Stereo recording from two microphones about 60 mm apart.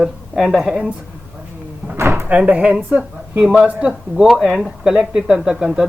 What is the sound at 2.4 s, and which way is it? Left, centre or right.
Speech, right.